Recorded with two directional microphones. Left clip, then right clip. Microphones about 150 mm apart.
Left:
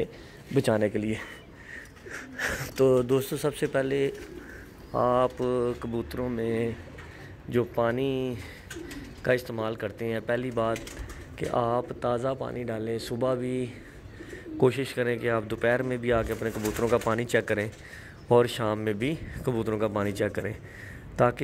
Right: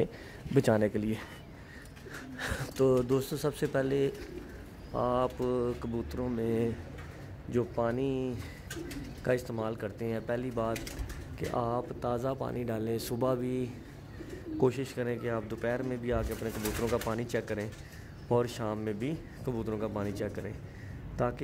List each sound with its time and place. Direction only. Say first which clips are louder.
0.6 s speech: left 2 dB; 5° right (ahead or behind)
2.0 s speech: left 7 dB; 15° left (ahead or behind)
4.9 s speech: left 6 dB; 20° left (ahead or behind)
6.4 s speech: left 2 dB; 10° left (ahead or behind)
7.5 s speech: left 5 dB; 30° left (ahead or behind)
9.2 s speech: left 5 dB; 15° left (ahead or behind)
12.4 s speech: left 2 dB; centre (ahead or behind)
14.6 s speech: left 6 dB; 20° left (ahead or behind); by 20.5 s 35° left (ahead or behind)